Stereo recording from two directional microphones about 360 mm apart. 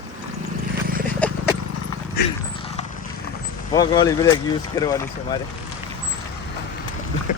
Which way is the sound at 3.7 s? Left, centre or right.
Centre.